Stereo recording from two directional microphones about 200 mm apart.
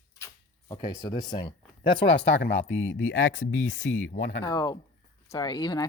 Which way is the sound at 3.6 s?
35° left (ahead or behind).